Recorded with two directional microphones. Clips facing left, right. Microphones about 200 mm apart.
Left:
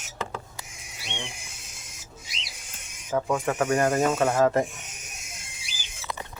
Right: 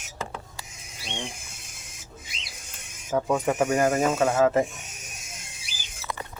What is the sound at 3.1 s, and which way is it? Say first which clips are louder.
Speech: right 2 dB; 10° right (ahead or behind).